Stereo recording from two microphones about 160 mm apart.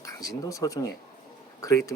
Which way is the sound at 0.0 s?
20° left (ahead or behind).